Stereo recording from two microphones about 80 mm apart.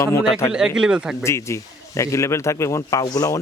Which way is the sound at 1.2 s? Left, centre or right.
Left.